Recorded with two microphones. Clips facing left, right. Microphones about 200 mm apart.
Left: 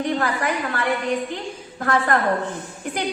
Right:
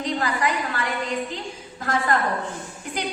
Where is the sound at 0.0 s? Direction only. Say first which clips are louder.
Left 2 dB; 55° left (ahead or behind).